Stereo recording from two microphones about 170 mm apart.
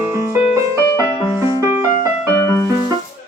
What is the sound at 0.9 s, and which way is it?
Music, 20° left (ahead or behind).